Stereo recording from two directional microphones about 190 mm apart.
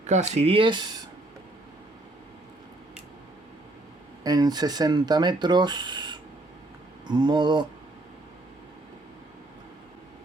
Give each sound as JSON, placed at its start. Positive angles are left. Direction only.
{"t": 0.1, "sound": "speech", "side_deg": -35}
{"t": 4.2, "sound": "speech", "side_deg": -20}